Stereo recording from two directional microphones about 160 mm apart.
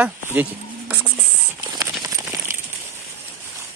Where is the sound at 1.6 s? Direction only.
20° right (ahead or behind).